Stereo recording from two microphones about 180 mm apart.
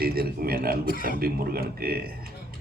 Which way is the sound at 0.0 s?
55° right (ahead or behind).